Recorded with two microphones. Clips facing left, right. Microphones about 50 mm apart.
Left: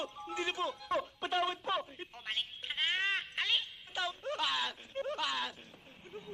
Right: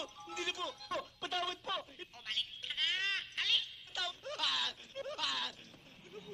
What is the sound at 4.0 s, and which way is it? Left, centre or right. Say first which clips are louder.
Wail: left 5 dB; centre.